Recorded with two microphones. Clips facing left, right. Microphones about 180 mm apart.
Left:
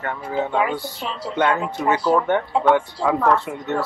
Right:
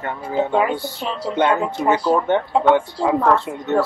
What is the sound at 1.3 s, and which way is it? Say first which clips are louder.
Speech: right 2 dB; 25° right (ahead or behind).